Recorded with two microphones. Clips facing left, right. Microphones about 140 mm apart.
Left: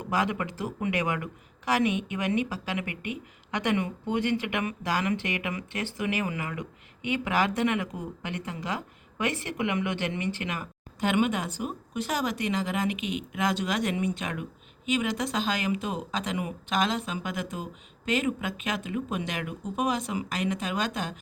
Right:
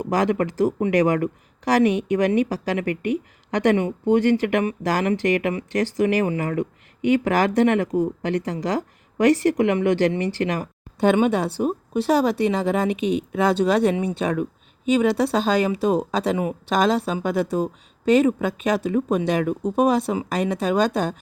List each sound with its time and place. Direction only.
0.0 s speech: 40° right (ahead or behind)